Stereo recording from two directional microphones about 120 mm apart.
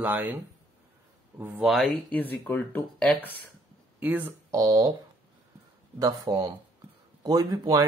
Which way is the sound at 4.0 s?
15° right (ahead or behind).